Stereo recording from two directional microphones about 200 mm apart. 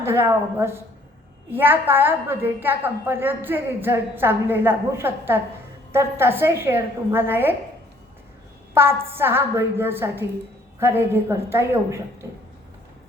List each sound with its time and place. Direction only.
0.0 s a woman's voice: 10° right (ahead or behind)
8.7 s a woman's voice: 10° right (ahead or behind)